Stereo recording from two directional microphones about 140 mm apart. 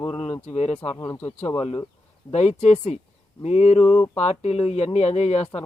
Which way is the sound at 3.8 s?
5° left (ahead or behind).